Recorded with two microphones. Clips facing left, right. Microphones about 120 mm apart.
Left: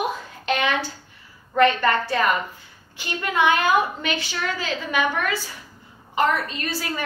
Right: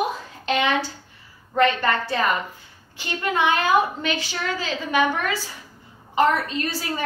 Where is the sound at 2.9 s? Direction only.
30° right (ahead or behind).